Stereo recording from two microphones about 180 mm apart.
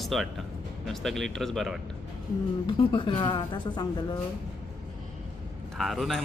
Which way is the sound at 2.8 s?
30° left (ahead or behind).